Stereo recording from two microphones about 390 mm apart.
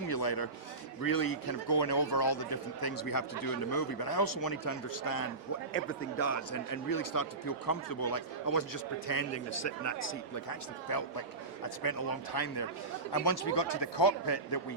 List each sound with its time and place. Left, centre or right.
0.1 s a sound: left
1.0 s speech: left
5.7 s speech: left
9.3 s speech: left